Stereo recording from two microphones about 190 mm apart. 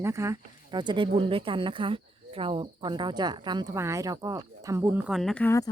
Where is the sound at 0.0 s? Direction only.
15° right (ahead or behind); by 5.7 s 15° left (ahead or behind).